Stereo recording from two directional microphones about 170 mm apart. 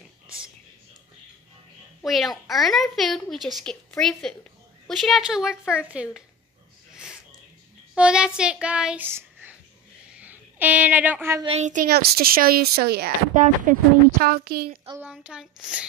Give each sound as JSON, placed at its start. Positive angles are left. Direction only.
{"t": 2.0, "sound": "a child's voice", "side_deg": 0}
{"t": 6.9, "sound": "a sound", "side_deg": -5}
{"t": 7.9, "sound": "child singing", "side_deg": -5}
{"t": 10.0, "sound": "a sound", "side_deg": -10}
{"t": 11.4, "sound": "a child's voice", "side_deg": -40}
{"t": 11.9, "sound": "a woman's voice", "side_deg": -60}
{"t": 13.3, "sound": "a woman's voice", "side_deg": -50}
{"t": 15.0, "sound": "speech", "side_deg": -5}